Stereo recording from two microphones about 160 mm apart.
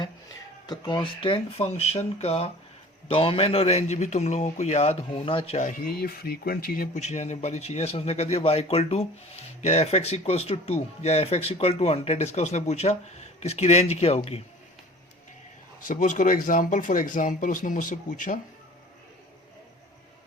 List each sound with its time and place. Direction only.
0.7 s a man's voice: 25° left (ahead or behind)
5.5 s speech: 50° left (ahead or behind)
7.0 s a man's voice: 45° left (ahead or behind)
15.9 s speech: 50° left (ahead or behind)